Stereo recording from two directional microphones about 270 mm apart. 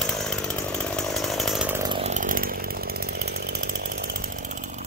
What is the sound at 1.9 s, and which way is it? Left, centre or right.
Chainsaw, right.